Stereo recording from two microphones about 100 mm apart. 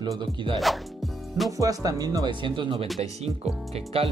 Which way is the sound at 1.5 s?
35° right (ahead or behind).